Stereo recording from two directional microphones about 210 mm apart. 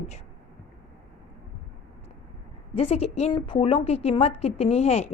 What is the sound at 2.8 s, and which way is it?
Speech, 30° left (ahead or behind).